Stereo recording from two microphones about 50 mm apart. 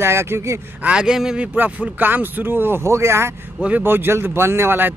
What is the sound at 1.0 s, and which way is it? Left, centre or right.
Speech, centre.